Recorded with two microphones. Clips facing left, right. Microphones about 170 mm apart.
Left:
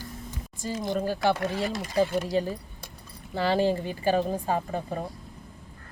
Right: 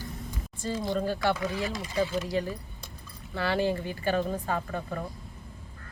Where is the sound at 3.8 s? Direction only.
25° left (ahead or behind).